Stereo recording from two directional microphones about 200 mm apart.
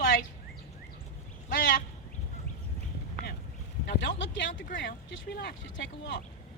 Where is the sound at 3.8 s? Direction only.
60° left (ahead or behind).